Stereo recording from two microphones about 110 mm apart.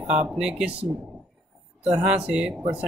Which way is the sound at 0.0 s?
90° right.